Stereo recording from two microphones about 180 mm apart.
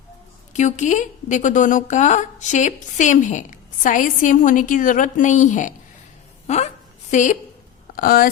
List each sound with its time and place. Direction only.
0.5 s a woman's voice: 45° left (ahead or behind)
7.9 s speech: 55° left (ahead or behind)